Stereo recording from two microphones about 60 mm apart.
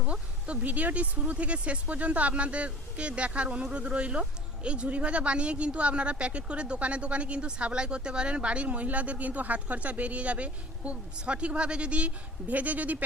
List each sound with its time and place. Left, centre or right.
0.0 s speech: centre